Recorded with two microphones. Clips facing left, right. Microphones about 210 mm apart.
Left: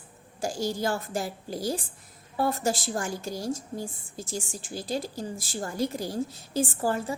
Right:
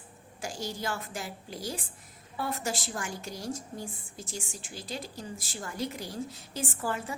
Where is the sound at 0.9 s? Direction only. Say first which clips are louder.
Left 6 dB; 35° left (ahead or behind).